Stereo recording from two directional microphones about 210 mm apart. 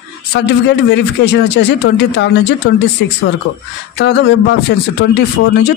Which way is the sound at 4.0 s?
55° left (ahead or behind).